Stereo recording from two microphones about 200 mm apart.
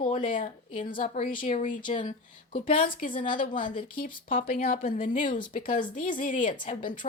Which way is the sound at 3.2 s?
40° left (ahead or behind).